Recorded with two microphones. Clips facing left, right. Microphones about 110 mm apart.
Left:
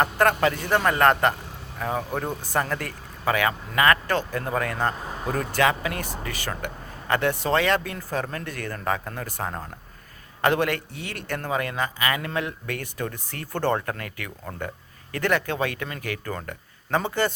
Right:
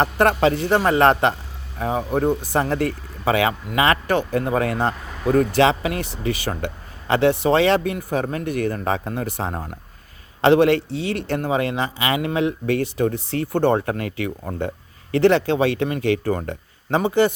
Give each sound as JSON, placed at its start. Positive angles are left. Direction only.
{"t": 0.0, "sound": "speech", "side_deg": -20}